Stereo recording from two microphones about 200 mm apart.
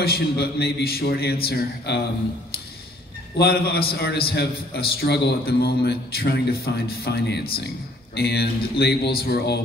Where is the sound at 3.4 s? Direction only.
50° left (ahead or behind).